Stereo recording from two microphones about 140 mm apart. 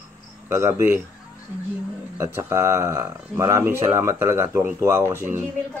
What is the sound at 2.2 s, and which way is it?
Speech, 20° right (ahead or behind).